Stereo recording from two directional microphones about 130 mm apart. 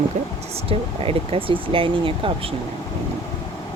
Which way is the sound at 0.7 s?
45° right (ahead or behind).